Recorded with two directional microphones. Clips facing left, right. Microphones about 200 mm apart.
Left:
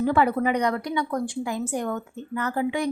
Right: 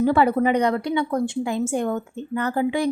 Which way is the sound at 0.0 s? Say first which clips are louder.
Right 3 dB; 30° right (ahead or behind).